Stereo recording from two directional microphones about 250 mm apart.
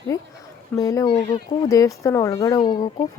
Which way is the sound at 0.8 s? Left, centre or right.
Centre.